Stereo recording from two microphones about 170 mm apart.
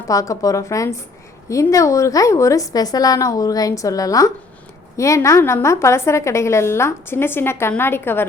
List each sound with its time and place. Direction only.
0.1 s a woman's voice: 20° left (ahead or behind)